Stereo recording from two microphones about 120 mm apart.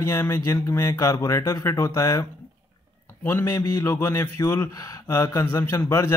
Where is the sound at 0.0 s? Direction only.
20° left (ahead or behind).